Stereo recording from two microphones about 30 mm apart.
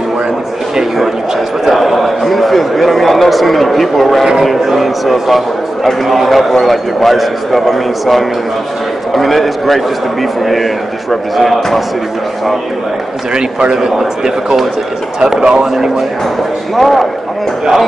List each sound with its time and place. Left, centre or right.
1.6 s a man's voice: centre
13.3 s a man's voice: right
13.7 s speech: centre
16.7 s a man's voice: centre